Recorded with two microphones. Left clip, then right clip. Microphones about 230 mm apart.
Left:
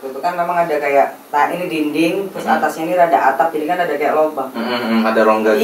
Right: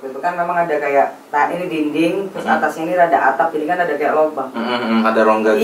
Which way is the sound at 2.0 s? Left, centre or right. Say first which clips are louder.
Left 1 dB; right.